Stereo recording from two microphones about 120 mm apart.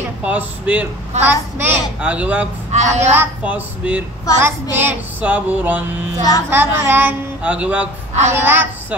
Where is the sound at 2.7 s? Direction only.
70° right (ahead or behind).